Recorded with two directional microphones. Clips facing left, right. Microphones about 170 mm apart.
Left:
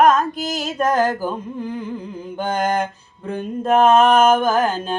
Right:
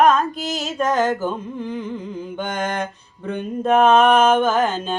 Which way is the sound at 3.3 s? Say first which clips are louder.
Even; 35° left (ahead or behind).